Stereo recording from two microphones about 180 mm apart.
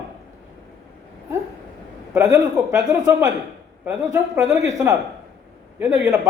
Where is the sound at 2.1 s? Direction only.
10° right (ahead or behind).